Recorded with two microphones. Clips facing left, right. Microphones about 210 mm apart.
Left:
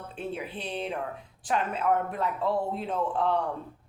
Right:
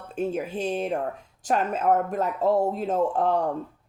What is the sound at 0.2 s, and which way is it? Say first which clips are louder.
Speech: right 8 dB; 45° right (ahead or behind).